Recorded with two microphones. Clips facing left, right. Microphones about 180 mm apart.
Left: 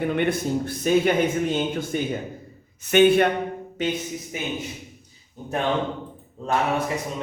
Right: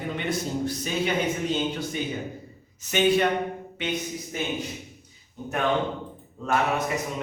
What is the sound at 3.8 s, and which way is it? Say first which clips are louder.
Speech: left 5 dB; 40° left (ahead or behind).